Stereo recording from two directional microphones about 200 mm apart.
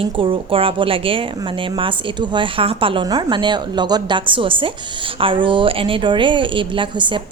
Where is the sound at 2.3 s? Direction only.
25° right (ahead or behind).